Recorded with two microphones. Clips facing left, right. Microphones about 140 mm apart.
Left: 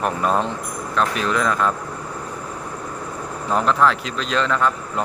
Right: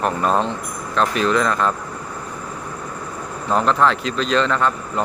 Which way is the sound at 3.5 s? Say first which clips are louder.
Right 1 dB; 5° left (ahead or behind).